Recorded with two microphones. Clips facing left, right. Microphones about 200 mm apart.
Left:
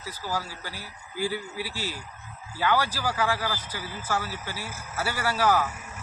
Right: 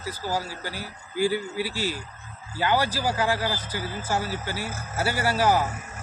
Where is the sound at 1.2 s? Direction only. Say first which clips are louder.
Right 6 dB; 25° right (ahead or behind).